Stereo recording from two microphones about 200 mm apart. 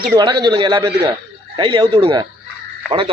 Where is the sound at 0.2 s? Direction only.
20° right (ahead or behind).